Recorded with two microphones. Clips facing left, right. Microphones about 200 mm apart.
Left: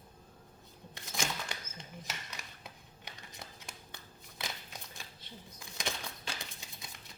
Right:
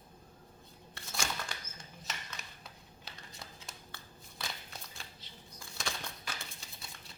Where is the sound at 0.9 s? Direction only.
20° left (ahead or behind).